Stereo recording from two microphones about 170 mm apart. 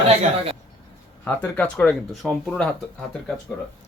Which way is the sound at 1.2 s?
10° left (ahead or behind).